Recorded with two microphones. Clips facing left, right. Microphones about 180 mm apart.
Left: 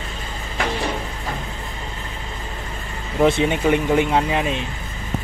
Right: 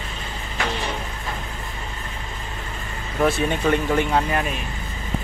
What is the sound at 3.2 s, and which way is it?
Speech, 20° left (ahead or behind).